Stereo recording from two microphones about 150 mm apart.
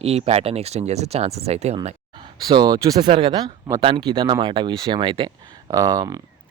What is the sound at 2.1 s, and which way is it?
Speech, 30° right (ahead or behind).